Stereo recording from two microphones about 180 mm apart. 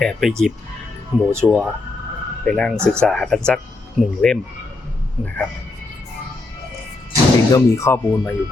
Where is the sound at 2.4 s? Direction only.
5° left (ahead or behind).